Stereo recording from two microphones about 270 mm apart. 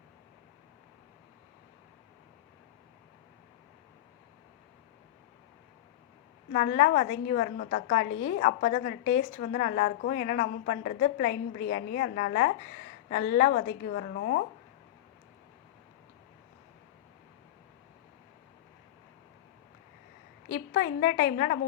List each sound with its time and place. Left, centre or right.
6.5 s a woman's voice: left
20.5 s a woman's voice: left